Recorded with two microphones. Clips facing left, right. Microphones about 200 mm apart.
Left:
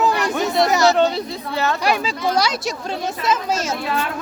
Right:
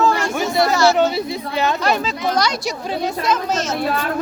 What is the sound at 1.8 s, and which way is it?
Speech, 10° left (ahead or behind).